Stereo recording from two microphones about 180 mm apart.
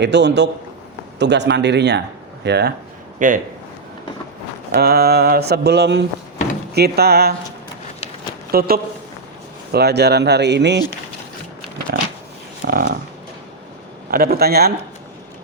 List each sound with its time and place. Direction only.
0.0 s speech: 70° right (ahead or behind)
3.2 s a man's voice: 45° right (ahead or behind)
4.7 s speech: 60° right (ahead or behind)
8.5 s speech: 55° right (ahead or behind)
12.6 s speech: 55° right (ahead or behind)
14.1 s speech: 55° right (ahead or behind)